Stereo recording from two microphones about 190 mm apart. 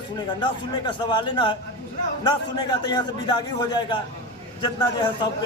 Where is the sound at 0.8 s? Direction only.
25° left (ahead or behind).